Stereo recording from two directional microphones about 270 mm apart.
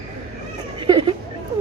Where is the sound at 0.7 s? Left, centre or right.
Centre.